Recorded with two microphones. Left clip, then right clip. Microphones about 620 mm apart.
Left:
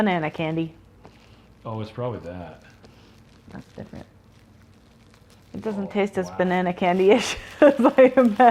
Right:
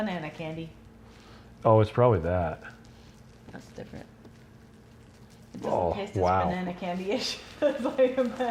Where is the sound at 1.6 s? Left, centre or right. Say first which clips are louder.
Right 10 dB; right.